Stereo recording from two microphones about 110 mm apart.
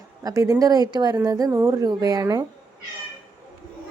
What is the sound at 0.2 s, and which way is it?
A woman's voice, 35° right (ahead or behind).